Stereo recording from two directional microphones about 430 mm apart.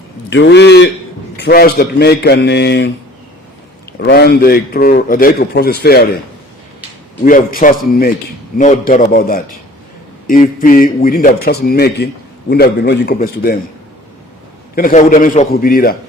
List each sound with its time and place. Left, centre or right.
0.3 s a man's voice: left
3.9 s a man's voice: left
7.3 s a man's voice: centre
14.8 s a man's voice: centre